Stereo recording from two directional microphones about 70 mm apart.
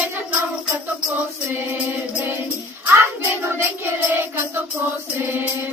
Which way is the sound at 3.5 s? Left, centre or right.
Right.